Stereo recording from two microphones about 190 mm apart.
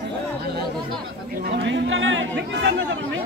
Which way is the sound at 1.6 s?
70° right (ahead or behind).